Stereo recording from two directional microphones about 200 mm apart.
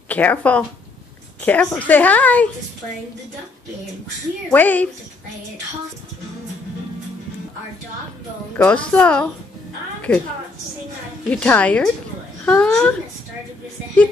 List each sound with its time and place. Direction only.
0.1 s speech: 10° left (ahead or behind)
4.5 s speech: 10° left (ahead or behind)
8.5 s a woman's voice: 5° left (ahead or behind)
11.2 s speech: 10° left (ahead or behind)